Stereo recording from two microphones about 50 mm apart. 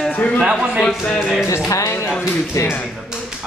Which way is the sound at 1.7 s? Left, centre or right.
Left.